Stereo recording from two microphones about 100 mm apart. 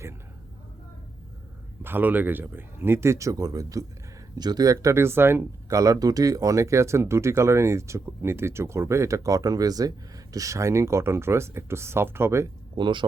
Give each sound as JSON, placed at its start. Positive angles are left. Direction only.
{"t": 1.8, "sound": "speech", "side_deg": -20}
{"t": 12.7, "sound": "speech", "side_deg": -55}